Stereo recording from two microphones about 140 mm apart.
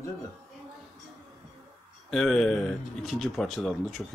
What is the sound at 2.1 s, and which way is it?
Speech, centre (ahead or behind).